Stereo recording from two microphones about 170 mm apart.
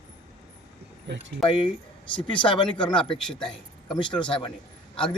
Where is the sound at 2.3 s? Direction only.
30° left (ahead or behind).